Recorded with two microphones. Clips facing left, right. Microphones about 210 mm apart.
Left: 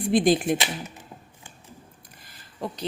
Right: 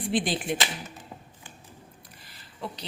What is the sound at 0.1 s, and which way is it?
Speech, 45° left (ahead or behind).